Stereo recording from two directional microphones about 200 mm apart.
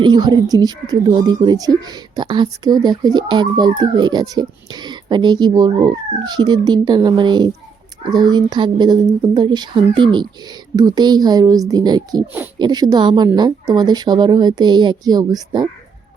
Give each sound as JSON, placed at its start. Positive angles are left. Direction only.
{"t": 0.0, "sound": "speech", "side_deg": -20}